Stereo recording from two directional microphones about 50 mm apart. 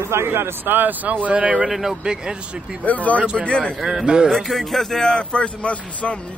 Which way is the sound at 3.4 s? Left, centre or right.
Left.